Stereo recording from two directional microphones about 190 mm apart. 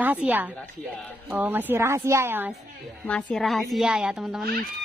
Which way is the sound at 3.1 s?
5° left (ahead or behind).